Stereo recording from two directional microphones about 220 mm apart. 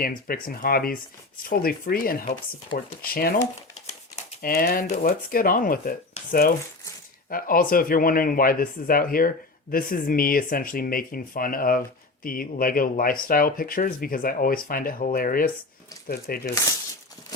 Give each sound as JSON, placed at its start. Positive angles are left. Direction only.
{"t": 0.0, "sound": "speech", "side_deg": 40}